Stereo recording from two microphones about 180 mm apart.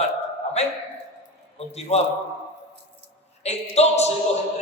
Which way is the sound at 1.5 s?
35° left (ahead or behind).